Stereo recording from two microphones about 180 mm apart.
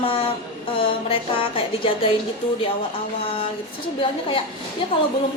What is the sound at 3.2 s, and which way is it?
A woman's voice, 30° left (ahead or behind).